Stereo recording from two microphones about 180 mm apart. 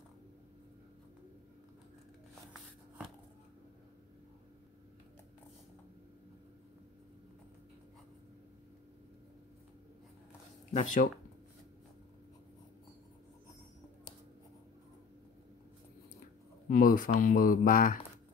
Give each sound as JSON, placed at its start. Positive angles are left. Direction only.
{"t": 10.7, "sound": "speech", "side_deg": 45}
{"t": 16.6, "sound": "speech", "side_deg": 50}